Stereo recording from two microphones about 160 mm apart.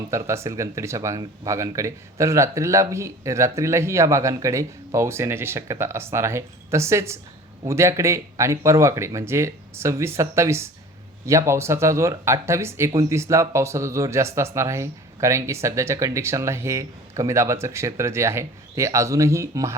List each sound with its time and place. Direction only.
0.1 s speech: 15° right (ahead or behind)